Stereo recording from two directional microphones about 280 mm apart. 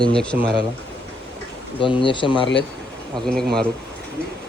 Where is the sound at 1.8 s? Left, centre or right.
Centre.